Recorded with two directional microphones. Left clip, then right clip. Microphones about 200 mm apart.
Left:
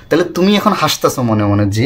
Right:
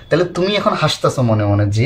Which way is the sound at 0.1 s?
40° left (ahead or behind).